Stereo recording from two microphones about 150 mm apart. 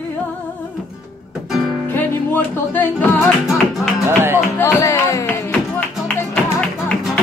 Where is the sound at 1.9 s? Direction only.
15° left (ahead or behind).